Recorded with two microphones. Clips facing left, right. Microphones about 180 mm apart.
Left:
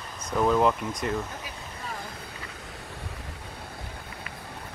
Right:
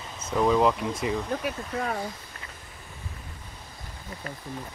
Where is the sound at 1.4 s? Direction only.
65° right (ahead or behind).